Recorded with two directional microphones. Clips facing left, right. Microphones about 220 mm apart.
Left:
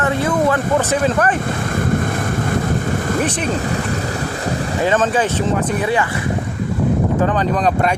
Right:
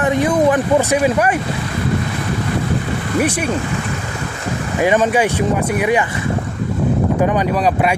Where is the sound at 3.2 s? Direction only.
10° right (ahead or behind).